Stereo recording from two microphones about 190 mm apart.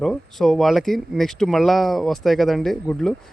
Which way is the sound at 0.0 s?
Centre (ahead or behind).